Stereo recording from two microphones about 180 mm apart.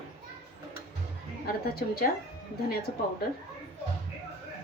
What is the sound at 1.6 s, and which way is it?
Speech, 60° left (ahead or behind).